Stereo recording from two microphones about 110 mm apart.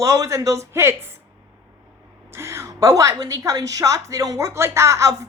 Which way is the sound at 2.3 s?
25° right (ahead or behind).